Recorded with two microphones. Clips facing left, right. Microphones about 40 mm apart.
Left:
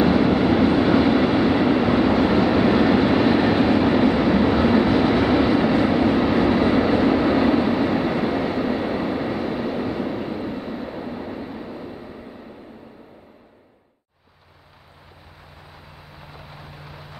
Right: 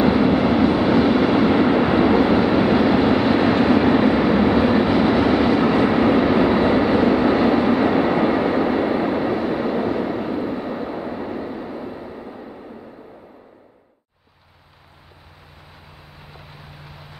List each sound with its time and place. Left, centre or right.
0.0 s vehicle: centre
7.6 s vehicle: right
16.2 s vehicle: centre